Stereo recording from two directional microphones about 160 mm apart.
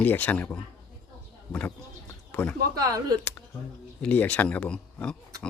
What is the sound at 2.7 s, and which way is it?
Speech, 20° right (ahead or behind).